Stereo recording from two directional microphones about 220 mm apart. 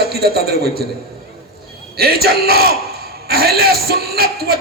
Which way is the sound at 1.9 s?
45° right (ahead or behind).